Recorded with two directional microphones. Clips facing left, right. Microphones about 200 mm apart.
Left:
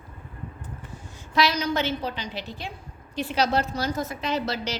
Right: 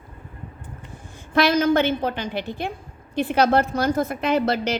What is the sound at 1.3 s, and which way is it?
A woman's voice, 55° right (ahead or behind).